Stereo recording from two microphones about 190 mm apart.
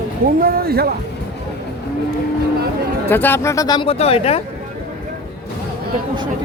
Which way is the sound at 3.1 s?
10° left (ahead or behind).